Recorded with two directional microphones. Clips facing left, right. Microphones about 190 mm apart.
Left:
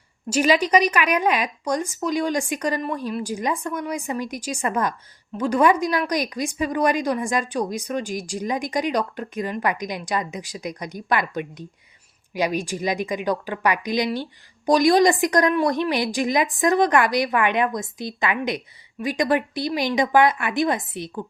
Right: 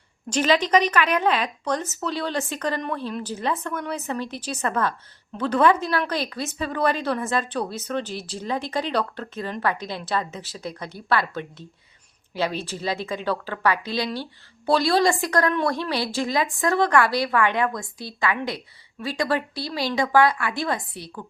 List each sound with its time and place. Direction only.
0.3 s a woman's voice: 10° left (ahead or behind)